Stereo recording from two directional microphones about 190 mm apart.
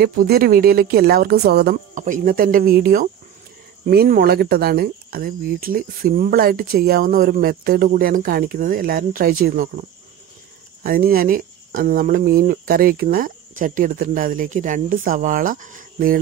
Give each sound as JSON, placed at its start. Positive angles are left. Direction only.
{"t": 0.0, "sound": "speech", "side_deg": -50}